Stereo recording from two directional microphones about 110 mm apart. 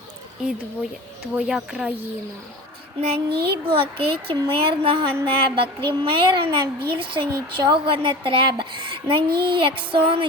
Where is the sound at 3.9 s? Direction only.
55° right (ahead or behind).